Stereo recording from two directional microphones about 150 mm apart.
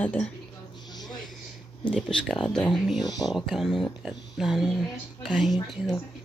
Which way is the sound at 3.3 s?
Centre (ahead or behind).